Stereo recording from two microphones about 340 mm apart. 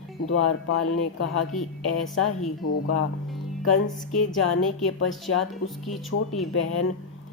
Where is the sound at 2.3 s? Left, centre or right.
Left.